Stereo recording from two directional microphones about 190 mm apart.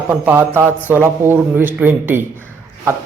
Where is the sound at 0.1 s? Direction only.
10° right (ahead or behind).